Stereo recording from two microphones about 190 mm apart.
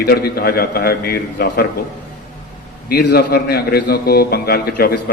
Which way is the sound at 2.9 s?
60° left (ahead or behind).